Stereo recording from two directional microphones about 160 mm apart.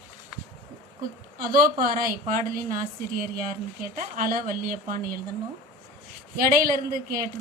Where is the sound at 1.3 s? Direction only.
65° right (ahead or behind).